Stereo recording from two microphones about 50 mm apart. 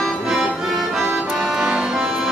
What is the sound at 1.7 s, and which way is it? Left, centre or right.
Music, centre.